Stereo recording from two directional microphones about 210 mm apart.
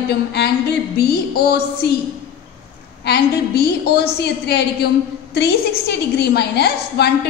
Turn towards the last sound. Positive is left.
turn(degrees=50)  # may be behind; listen again after turning